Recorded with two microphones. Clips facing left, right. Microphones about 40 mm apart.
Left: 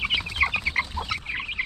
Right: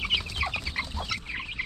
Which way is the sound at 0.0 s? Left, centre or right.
Centre.